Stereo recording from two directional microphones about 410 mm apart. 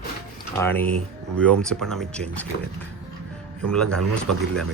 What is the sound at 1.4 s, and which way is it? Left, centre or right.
Speech, centre.